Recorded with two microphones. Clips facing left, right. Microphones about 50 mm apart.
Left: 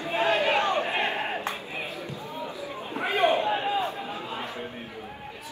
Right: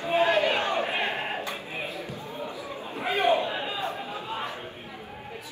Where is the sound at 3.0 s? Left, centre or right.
Left.